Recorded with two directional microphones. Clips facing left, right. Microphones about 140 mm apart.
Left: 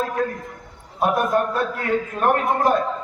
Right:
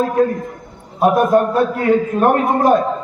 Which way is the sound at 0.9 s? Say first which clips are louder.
Right 7 dB; 15° right (ahead or behind).